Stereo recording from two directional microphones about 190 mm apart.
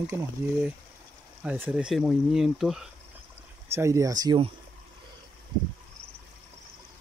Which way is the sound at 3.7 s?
15° right (ahead or behind).